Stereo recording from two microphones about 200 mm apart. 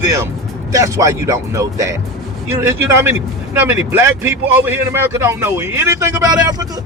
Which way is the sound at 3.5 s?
10° right (ahead or behind).